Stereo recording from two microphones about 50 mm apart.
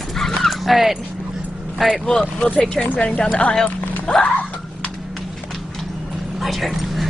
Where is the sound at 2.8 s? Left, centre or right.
Left.